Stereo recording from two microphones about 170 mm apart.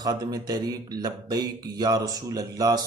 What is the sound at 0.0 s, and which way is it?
Speech, 25° right (ahead or behind).